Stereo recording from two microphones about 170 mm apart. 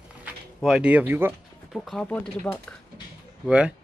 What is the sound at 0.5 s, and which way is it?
Speech, centre (ahead or behind).